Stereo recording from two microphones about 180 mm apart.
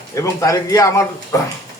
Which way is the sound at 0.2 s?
20° left (ahead or behind).